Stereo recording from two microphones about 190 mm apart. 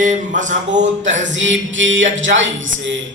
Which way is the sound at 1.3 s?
80° right.